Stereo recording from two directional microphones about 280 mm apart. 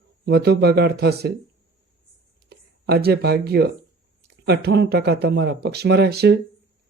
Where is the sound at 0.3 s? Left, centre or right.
Right.